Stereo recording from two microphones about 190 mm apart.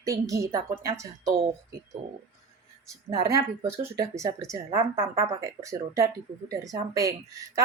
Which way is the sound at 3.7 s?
15° right (ahead or behind).